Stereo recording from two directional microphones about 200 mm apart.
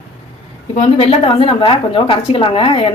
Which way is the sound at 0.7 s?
30° left (ahead or behind).